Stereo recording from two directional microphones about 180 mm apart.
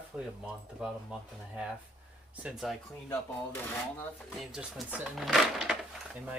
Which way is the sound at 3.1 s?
10° left (ahead or behind).